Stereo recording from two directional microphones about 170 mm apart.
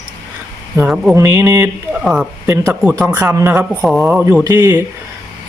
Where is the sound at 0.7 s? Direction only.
10° right (ahead or behind).